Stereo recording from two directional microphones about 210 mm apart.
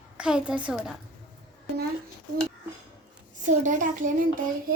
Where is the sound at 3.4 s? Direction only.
35° right (ahead or behind).